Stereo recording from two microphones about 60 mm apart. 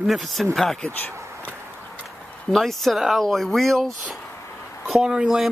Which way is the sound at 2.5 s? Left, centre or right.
Centre.